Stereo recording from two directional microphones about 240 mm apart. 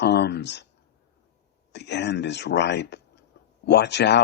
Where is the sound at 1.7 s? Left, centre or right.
Left.